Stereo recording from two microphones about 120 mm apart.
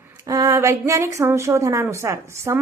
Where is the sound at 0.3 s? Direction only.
30° right (ahead or behind).